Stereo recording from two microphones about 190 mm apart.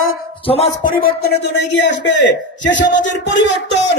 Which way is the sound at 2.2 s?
70° left (ahead or behind).